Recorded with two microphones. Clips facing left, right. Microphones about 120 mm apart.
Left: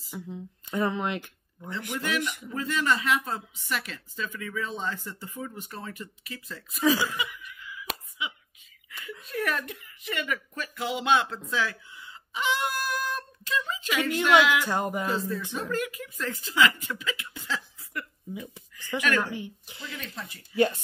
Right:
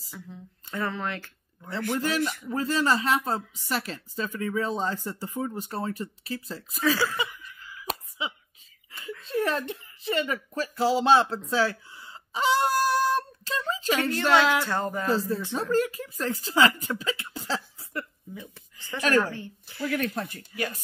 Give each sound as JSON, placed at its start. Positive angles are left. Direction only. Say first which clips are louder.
{"t": 0.1, "sound": "speech", "louder": "left 5 dB", "side_deg": 20}
{"t": 2.0, "sound": "speech", "louder": "right 1 dB", "side_deg": -35}
{"t": 6.8, "sound": "a woman's voice", "louder": "left 1 dB", "side_deg": 15}
{"t": 7.2, "sound": "cough", "louder": "right 3 dB", "side_deg": -35}
{"t": 9.2, "sound": "speech", "louder": "right 4 dB", "side_deg": -30}
{"t": 14.6, "sound": "a woman's voice", "louder": "even", "side_deg": 15}
{"t": 15.0, "sound": "speech", "louder": "right 3 dB", "side_deg": -30}
{"t": 19.3, "sound": "a woman's voice", "louder": "left 2 dB", "side_deg": 15}
{"t": 19.9, "sound": "speech", "louder": "right 11 dB", "side_deg": -60}
{"t": 20.5, "sound": "speech", "louder": "left 9 dB", "side_deg": 25}